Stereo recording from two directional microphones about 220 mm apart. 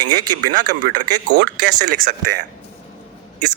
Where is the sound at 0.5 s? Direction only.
40° right (ahead or behind).